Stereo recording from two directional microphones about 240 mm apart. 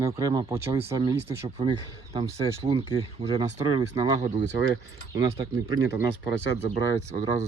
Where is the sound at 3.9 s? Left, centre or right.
Right.